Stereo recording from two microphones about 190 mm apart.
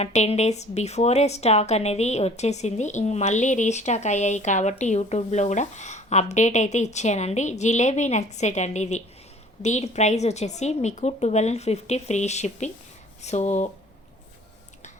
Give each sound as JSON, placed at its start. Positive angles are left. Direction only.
{"t": 0.0, "sound": "speech", "side_deg": 35}